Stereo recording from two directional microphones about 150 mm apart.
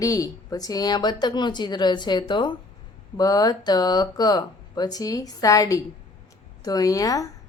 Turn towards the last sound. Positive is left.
turn(degrees=25)  # may be behind; listen again after turning